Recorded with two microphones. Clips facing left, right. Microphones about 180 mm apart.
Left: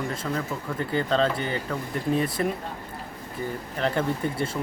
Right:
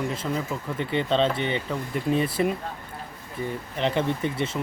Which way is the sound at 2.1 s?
25° right (ahead or behind).